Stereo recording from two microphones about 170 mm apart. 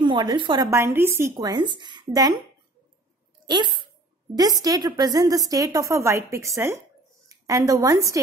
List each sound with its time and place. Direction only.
0.0 s a woman's voice: 25° right (ahead or behind)
0.7 s a woman's voice: 15° right (ahead or behind)
1.3 s a woman's voice: 25° right (ahead or behind)
3.4 s a woman's voice: 25° right (ahead or behind)